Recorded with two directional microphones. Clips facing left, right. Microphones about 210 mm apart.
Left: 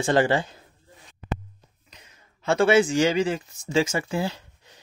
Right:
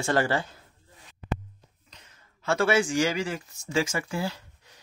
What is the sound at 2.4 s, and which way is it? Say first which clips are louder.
Speech: left 5 dB; 20° left (ahead or behind).